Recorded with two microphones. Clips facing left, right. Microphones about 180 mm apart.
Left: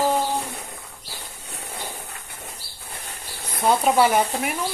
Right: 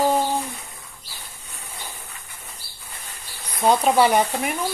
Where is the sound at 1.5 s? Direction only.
70° left (ahead or behind).